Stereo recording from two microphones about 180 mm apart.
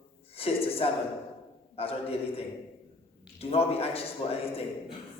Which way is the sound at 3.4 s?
35° left (ahead or behind).